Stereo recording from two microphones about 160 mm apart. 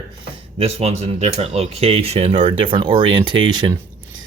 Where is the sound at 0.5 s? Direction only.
40° right (ahead or behind).